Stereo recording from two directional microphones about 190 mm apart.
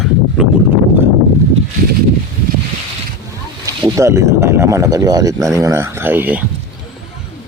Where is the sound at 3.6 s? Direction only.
20° right (ahead or behind).